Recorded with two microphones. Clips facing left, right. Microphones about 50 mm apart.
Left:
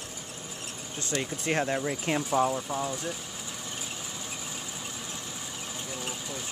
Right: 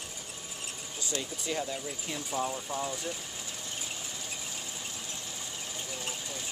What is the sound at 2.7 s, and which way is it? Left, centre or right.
Speech, centre.